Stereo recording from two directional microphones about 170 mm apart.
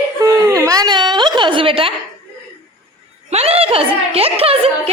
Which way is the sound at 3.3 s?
40° right (ahead or behind).